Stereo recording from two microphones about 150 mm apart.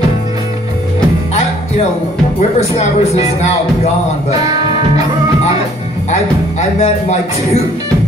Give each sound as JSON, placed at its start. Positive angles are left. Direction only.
{"t": 2.8, "sound": "speech", "side_deg": 45}
{"t": 6.0, "sound": "speech", "side_deg": 45}